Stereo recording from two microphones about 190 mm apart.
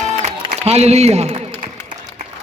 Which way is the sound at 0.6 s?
35° right (ahead or behind).